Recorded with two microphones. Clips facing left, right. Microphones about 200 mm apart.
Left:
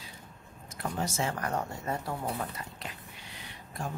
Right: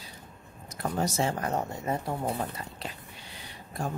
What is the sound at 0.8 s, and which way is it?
Speech, 40° right (ahead or behind).